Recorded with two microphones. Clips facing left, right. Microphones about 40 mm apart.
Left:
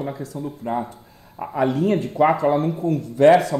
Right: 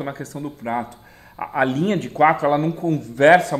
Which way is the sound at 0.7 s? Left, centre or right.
Right.